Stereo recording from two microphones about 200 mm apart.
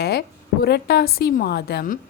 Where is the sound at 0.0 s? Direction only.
55° left (ahead or behind).